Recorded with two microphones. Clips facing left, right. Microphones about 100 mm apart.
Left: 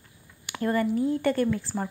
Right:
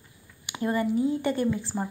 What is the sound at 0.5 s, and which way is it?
A woman's voice, 15° right (ahead or behind).